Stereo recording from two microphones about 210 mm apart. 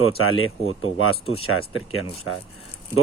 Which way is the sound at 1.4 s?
90° left.